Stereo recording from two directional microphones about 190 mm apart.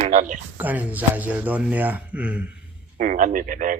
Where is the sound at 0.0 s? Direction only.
40° right (ahead or behind).